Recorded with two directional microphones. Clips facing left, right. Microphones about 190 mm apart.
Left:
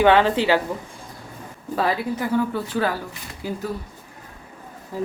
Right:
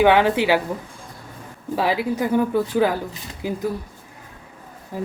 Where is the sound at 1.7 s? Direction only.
15° right (ahead or behind).